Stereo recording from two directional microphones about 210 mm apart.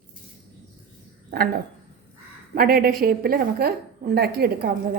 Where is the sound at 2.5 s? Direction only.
45° right (ahead or behind).